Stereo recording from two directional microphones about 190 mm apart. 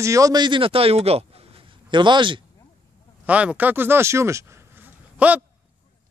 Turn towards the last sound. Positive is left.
turn(degrees=-10)  # may be behind; listen again after turning